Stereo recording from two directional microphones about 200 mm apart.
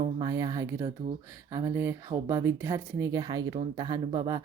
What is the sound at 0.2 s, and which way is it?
Speech, 20° right (ahead or behind).